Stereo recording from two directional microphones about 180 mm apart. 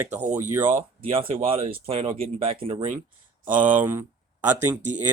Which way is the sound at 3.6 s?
10° right (ahead or behind).